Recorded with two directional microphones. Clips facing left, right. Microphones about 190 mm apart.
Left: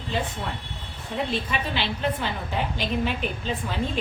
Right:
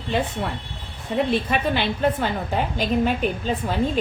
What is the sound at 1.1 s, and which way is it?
A woman's voice, 55° right (ahead or behind).